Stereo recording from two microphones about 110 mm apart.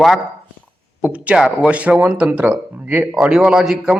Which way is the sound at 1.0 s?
15° right (ahead or behind).